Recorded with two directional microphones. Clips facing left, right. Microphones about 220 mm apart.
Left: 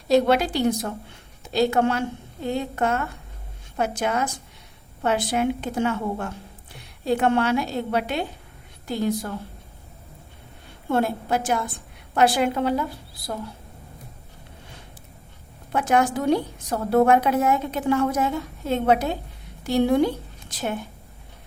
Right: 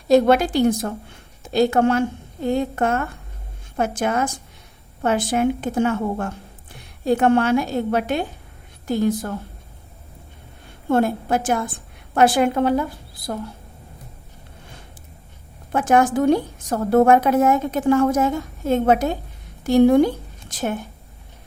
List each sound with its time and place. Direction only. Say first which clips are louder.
0.1 s a woman's voice: right 4 dB; 50° right (ahead or behind)
10.8 s a woman's voice: right 4 dB; 50° right (ahead or behind)
15.7 s a woman's voice: right 4 dB; 50° right (ahead or behind)